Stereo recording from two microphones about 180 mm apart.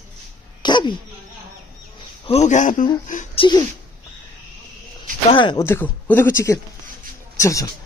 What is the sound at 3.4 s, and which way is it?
Speech, 20° left (ahead or behind).